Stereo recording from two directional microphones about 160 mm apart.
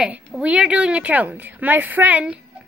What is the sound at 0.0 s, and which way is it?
Speech, 5° right (ahead or behind).